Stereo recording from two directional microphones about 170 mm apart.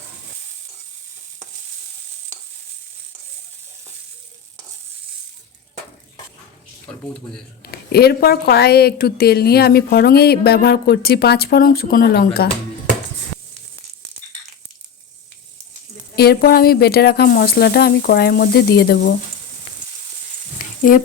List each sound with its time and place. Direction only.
6.9 s speech: 5° left (ahead or behind)
7.6 s a woman's voice: 65° left (ahead or behind)
16.1 s a woman's voice: 70° left (ahead or behind)
20.6 s a sound: 55° left (ahead or behind)